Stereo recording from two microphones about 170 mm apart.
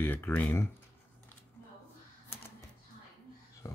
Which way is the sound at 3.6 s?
20° left (ahead or behind).